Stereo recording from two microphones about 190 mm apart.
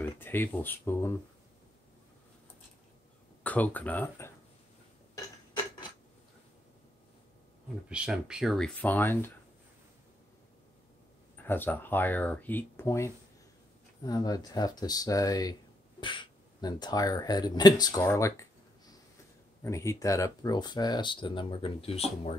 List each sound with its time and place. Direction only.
0.0 s speech: 10° left (ahead or behind)
3.4 s speech: 10° left (ahead or behind)
7.9 s speech: 5° right (ahead or behind); by 9.3 s 10° left (ahead or behind)
11.3 s speech: 10° left (ahead or behind)
19.6 s speech: 15° left (ahead or behind); by 22.4 s 30° left (ahead or behind)